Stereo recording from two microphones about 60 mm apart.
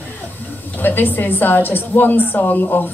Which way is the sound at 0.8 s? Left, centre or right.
Left.